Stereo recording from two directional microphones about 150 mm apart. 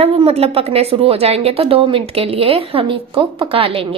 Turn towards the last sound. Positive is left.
turn(degrees=-35)  # may be behind; listen again after turning